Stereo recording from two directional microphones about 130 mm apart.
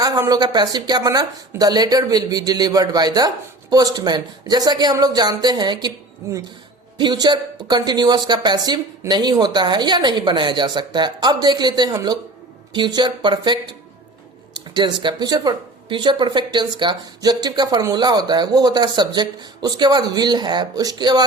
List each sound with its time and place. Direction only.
0.0 s speech: 30° right (ahead or behind)
7.0 s speech: 35° right (ahead or behind)